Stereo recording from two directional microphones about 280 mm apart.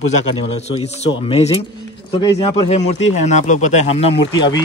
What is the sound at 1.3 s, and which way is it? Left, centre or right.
Speech, left.